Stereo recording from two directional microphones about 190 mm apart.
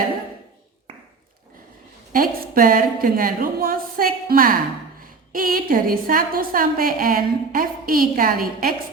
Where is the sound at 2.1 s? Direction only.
50° right (ahead or behind).